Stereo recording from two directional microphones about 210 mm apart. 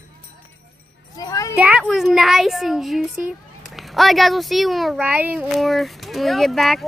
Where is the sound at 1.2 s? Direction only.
15° left (ahead or behind).